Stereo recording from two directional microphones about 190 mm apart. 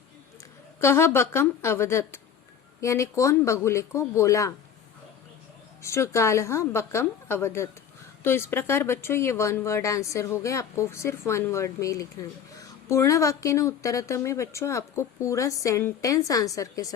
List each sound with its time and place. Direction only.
0.8 s speech: 15° left (ahead or behind)
5.8 s speech: 15° left (ahead or behind)